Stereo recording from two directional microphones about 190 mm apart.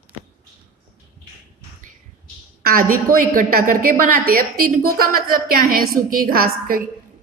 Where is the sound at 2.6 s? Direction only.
50° right (ahead or behind).